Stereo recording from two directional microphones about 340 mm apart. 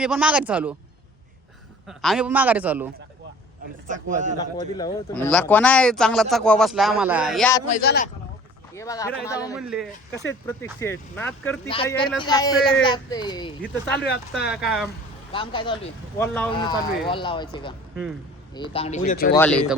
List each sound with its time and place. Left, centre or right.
0.0 s speech: centre
1.9 s speech: centre
3.8 s a man's voice: right
4.5 s speech: centre
7.7 s speech: left
8.7 s speech: centre
9.6 s speech: centre
14.0 s speech: left
14.4 s speech: centre
15.3 s speech: centre
19.3 s speech: centre